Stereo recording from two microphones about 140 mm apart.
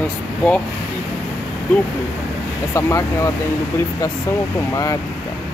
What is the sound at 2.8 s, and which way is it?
Speech, 20° left (ahead or behind).